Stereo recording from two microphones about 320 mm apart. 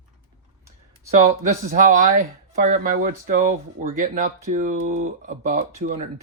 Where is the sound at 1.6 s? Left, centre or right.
Right.